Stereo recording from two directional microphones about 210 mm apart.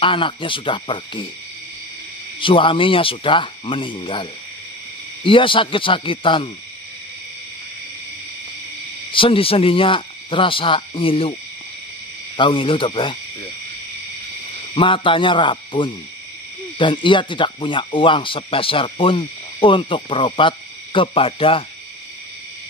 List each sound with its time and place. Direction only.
0.0 s speech: 25° left (ahead or behind)
2.4 s speech: 25° left (ahead or behind)
9.1 s speech: 25° left (ahead or behind)
12.4 s speech: 25° left (ahead or behind)
14.8 s speech: 25° left (ahead or behind)